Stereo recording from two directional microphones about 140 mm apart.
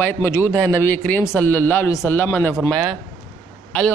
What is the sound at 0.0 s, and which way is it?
A man's voice, 15° left (ahead or behind).